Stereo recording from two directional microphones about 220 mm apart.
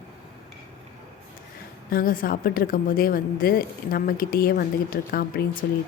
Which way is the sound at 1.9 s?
40° left (ahead or behind).